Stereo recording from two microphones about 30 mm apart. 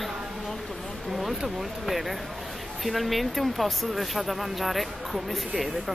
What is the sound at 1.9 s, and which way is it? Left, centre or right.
Speech, centre.